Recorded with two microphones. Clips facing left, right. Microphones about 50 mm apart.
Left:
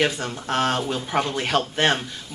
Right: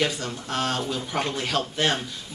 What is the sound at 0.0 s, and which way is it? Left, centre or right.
A man's voice, left.